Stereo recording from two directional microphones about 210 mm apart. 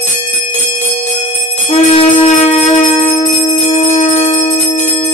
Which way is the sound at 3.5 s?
30° left (ahead or behind).